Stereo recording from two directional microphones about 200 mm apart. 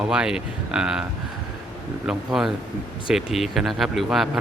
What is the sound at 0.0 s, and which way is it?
Speech, 5° right (ahead or behind).